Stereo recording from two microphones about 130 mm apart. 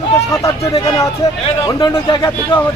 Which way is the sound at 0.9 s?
25° left (ahead or behind).